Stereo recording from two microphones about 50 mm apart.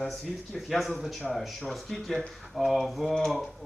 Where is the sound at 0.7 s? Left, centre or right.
Centre.